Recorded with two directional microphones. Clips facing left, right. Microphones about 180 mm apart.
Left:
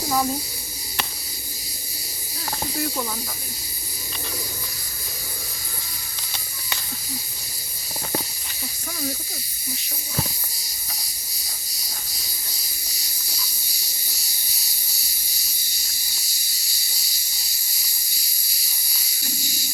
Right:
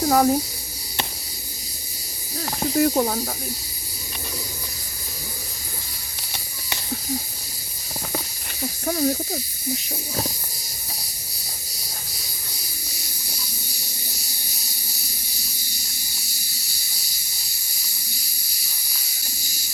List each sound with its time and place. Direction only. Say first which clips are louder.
0.1 s speech: right 5 dB; 55° right (ahead or behind)
2.7 s speech: right 11 dB; 50° right (ahead or behind)
8.9 s speech: right 9 dB; 45° right (ahead or behind)